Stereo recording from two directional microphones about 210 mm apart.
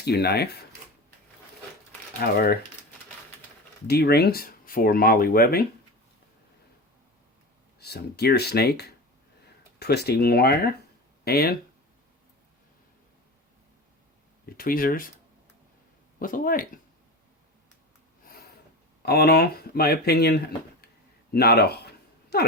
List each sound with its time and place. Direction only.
0.0 s speech: 50° left (ahead or behind)
2.2 s speech: 45° left (ahead or behind)
3.8 s speech: 50° left (ahead or behind)
7.8 s speech: 50° left (ahead or behind)
14.4 s speech: 45° left (ahead or behind)
16.2 s speech: 40° left (ahead or behind)
19.0 s speech: 50° left (ahead or behind)